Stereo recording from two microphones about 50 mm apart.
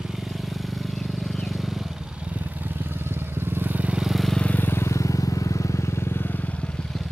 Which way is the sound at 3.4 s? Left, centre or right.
Right.